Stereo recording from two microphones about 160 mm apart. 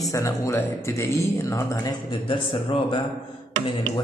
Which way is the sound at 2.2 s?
35° left (ahead or behind).